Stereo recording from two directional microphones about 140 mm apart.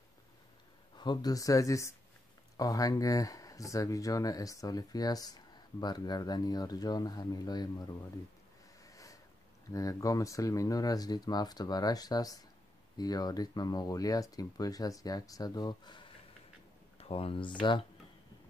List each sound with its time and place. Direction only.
0.9 s speech: 30° left (ahead or behind)
8.9 s a sound: 25° left (ahead or behind)
9.7 s speech: 25° left (ahead or behind)
17.0 s speech: 45° left (ahead or behind)